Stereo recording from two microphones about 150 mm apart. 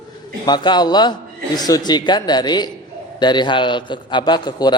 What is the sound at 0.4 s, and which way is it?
A man's voice, 30° left (ahead or behind).